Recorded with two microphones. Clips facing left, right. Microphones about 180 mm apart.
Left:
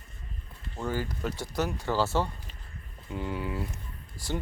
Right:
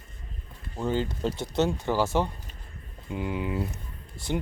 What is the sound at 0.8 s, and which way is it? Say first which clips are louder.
Speech: right 4 dB; 20° right (ahead or behind).